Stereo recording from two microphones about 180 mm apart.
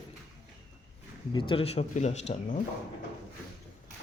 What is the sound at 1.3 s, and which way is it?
Speech, 30° left (ahead or behind).